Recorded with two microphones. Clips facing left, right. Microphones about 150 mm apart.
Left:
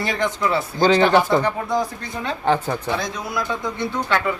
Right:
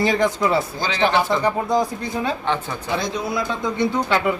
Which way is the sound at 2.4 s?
40° left (ahead or behind).